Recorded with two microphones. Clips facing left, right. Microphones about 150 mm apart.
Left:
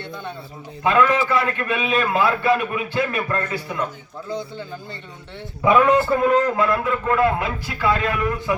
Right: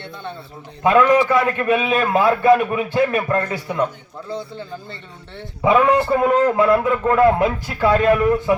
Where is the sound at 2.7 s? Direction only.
20° right (ahead or behind).